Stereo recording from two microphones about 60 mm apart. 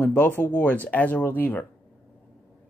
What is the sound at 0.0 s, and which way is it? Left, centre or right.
Speech, left.